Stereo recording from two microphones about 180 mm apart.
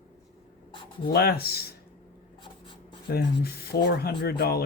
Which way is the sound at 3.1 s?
60° left (ahead or behind).